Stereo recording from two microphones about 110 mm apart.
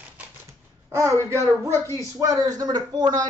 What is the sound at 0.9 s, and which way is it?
A child's voice, 25° right (ahead or behind).